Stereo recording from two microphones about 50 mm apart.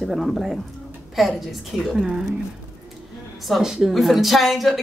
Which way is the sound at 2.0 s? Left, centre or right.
Centre.